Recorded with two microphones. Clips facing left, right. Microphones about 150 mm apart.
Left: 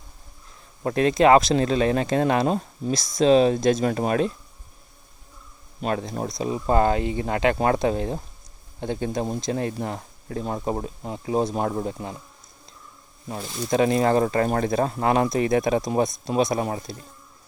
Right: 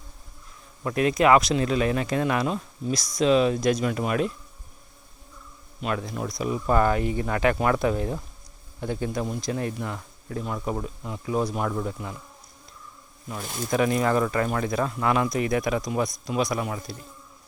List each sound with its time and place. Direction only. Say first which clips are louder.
0.8 s speech: left 3 dB; 30° left (ahead or behind)
2.9 s speech: left 3 dB; 25° left (ahead or behind)
5.8 s speech: left 3 dB; 35° left (ahead or behind)
13.7 s speech: left 3 dB; 30° left (ahead or behind)